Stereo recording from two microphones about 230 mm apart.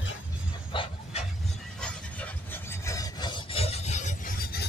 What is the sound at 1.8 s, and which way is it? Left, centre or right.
Rub, centre.